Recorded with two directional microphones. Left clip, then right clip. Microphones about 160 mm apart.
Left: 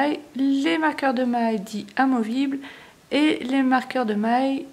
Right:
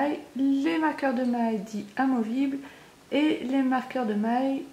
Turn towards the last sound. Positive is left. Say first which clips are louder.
# left 5 dB
turn(degrees=35)  # may be behind; listen again after turning